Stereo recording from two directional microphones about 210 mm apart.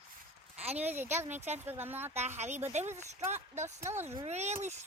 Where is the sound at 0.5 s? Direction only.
30° right (ahead or behind).